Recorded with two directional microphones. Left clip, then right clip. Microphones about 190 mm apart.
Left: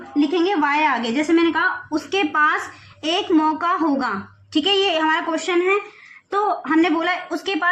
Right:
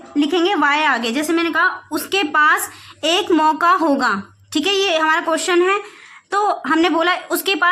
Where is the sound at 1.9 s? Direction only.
40° right (ahead or behind).